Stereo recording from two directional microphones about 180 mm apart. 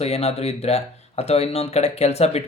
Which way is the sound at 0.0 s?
35° left (ahead or behind).